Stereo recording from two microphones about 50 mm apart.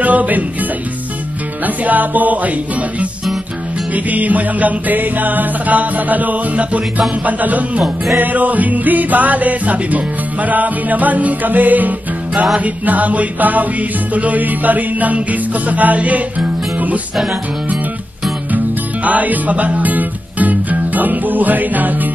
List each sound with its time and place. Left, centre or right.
0.0 s music: right
1.9 s music: right
7.8 s music: centre
8.2 s music: right
19.0 s music: right